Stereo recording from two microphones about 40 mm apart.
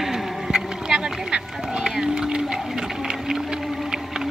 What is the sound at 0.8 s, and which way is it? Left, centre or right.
Run, centre.